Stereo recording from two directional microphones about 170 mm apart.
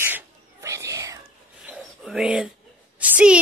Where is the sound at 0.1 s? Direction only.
15° right (ahead or behind).